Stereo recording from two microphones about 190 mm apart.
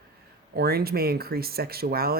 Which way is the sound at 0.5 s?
55° right (ahead or behind).